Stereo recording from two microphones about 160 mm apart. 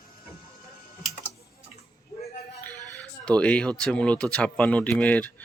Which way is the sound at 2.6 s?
10° left (ahead or behind).